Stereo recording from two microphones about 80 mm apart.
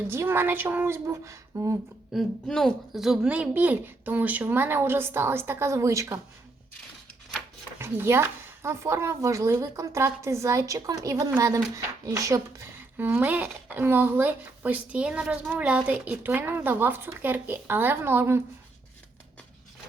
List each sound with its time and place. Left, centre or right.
0.1 s speech: right
2.1 s a woman's voice: centre
3.2 s speech: centre; by 6.1 s right
7.8 s speech: right